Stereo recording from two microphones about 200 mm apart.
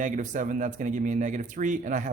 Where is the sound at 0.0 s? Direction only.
40° right (ahead or behind).